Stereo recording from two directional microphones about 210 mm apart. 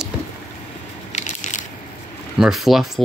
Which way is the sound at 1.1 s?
35° left (ahead or behind).